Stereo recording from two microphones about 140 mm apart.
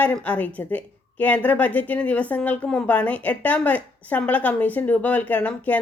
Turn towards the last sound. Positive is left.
turn(degrees=10)  # may be behind; listen again after turning